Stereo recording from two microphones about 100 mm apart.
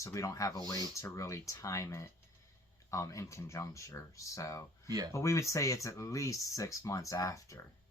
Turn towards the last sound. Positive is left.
turn(degrees=35)  # may be behind; listen again after turning